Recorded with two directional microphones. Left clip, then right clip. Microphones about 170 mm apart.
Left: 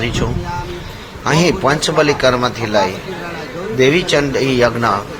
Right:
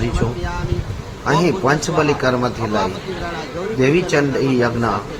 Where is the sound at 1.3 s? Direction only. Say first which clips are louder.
Left 2 dB; 25° left (ahead or behind).